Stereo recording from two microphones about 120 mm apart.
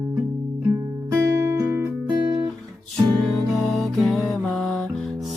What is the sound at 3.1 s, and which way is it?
Music, centre (ahead or behind).